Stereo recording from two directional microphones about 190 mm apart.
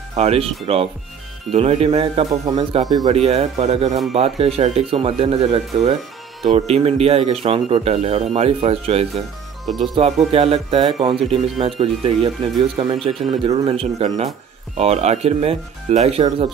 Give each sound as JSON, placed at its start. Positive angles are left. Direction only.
{"t": 0.1, "sound": "speech", "side_deg": -35}